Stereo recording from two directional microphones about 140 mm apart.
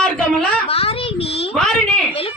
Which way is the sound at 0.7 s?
45° left (ahead or behind).